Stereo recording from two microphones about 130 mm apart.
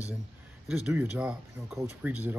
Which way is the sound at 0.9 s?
10° right (ahead or behind).